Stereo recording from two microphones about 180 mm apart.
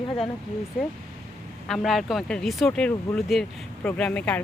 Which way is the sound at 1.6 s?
Centre (ahead or behind).